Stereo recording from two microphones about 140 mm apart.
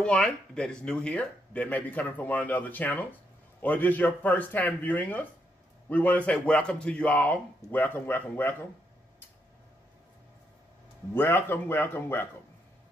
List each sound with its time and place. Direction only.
0.0 s speech: 5° left (ahead or behind)
11.1 s speech: 15° left (ahead or behind)